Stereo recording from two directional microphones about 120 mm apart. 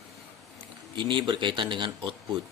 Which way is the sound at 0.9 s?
40° right (ahead or behind).